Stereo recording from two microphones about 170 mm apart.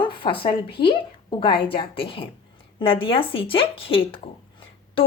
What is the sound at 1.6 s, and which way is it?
Speech, 30° left (ahead or behind).